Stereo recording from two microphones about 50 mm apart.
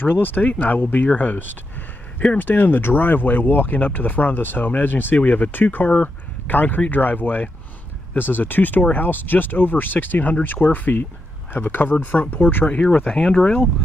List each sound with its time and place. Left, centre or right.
0.0 s speech: left
11.9 s speech: left
13.1 s speech: centre